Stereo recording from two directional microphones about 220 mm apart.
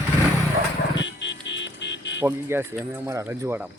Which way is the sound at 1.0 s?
55° left (ahead or behind).